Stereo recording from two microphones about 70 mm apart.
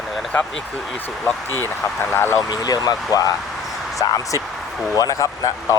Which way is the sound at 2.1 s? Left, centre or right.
Left.